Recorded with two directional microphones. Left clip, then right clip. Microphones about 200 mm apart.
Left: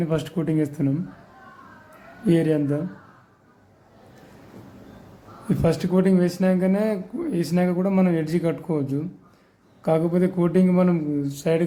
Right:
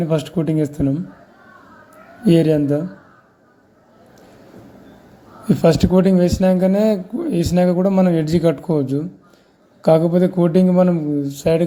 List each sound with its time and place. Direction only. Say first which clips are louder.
0.0 s speech: right 5 dB; 15° right (ahead or behind)
2.2 s speech: right 6 dB; 20° right (ahead or behind)
5.5 s speech: right 8 dB; 20° right (ahead or behind)